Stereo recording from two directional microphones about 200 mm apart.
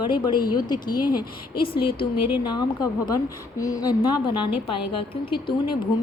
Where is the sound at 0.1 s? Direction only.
20° left (ahead or behind).